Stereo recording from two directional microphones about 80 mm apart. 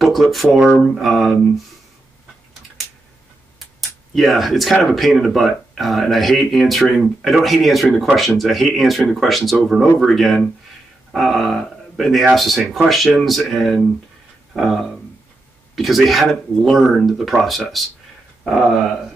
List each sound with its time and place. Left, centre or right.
0.0 s speech: centre
4.1 s speech: centre